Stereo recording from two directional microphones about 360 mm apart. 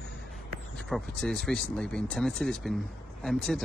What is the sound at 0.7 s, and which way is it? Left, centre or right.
A man's voice, centre.